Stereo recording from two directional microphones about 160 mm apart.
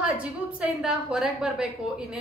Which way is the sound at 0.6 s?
5° right (ahead or behind).